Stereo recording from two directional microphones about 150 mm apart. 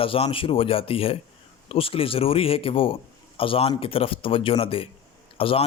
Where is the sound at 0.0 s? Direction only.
40° left (ahead or behind).